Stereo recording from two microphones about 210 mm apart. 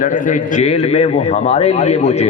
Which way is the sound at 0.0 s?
40° left (ahead or behind).